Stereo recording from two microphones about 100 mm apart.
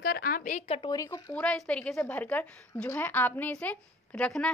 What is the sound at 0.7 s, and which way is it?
Speech, 50° left (ahead or behind).